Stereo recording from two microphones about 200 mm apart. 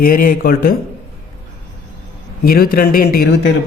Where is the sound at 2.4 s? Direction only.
50° left (ahead or behind).